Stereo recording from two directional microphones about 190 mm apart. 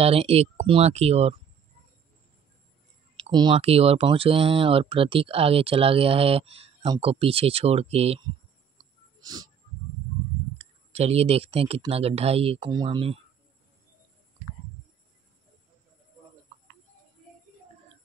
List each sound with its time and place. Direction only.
0.0 s speech: 30° right (ahead or behind)
3.2 s speech: 25° right (ahead or behind)
9.2 s a sound: 20° right (ahead or behind)
10.6 s speech: 35° right (ahead or behind)